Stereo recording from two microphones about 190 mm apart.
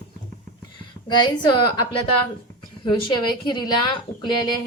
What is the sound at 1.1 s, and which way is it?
Speech, 25° left (ahead or behind).